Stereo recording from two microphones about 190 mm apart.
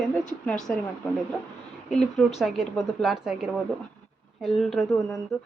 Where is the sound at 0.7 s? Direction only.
5° left (ahead or behind).